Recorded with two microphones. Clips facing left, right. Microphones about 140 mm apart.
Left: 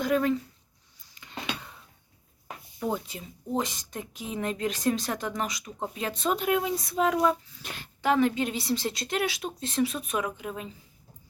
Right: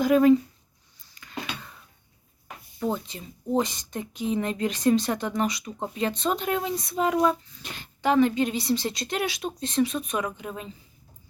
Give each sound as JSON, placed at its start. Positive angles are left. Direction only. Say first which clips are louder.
{"t": 0.0, "sound": "speech", "louder": "right 7 dB", "side_deg": -10}
{"t": 1.1, "sound": "a sound", "louder": "even", "side_deg": 25}
{"t": 2.7, "sound": "a woman's voice", "louder": "right 2 dB", "side_deg": 10}